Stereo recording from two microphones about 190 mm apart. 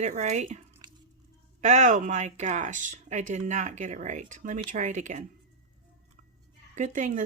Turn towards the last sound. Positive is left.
turn(degrees=-40)  # may be behind; listen again after turning